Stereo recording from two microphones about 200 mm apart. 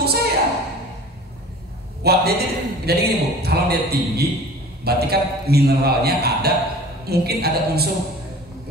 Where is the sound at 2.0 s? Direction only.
55° right (ahead or behind).